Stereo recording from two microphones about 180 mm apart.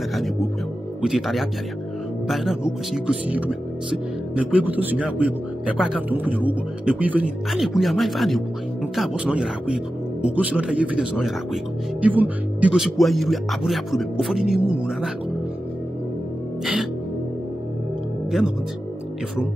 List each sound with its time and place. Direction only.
1.0 s a man's voice: centre (ahead or behind)